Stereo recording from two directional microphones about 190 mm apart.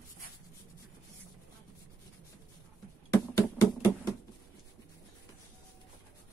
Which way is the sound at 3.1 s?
20° left (ahead or behind).